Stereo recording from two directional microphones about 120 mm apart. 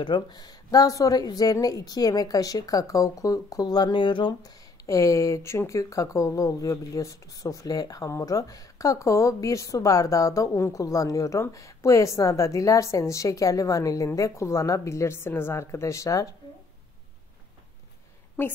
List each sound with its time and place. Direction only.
0.0 s a woman's voice: 35° left (ahead or behind)